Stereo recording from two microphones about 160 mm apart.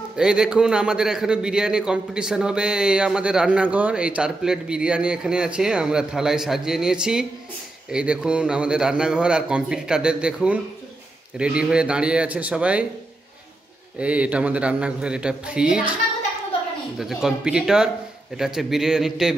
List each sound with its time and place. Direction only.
0.2 s a man's voice: 5° right (ahead or behind)
13.9 s a man's voice: 10° right (ahead or behind)
17.0 s a man's voice: 5° right (ahead or behind)